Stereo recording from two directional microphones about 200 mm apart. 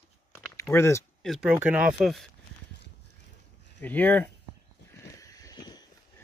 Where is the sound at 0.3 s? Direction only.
10° left (ahead or behind).